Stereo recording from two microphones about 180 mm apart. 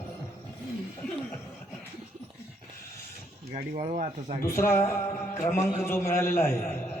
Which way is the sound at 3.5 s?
30° right (ahead or behind).